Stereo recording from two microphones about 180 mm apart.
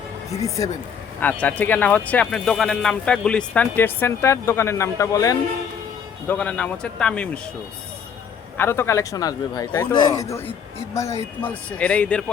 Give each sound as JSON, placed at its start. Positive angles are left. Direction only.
{"t": 0.4, "sound": "speech", "side_deg": 20}
{"t": 6.2, "sound": "speech", "side_deg": 10}
{"t": 8.5, "sound": "a man's voice", "side_deg": 15}